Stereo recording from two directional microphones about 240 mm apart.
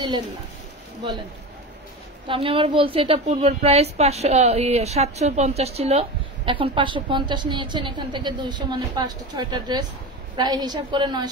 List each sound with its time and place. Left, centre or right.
2.2 s a woman's voice: right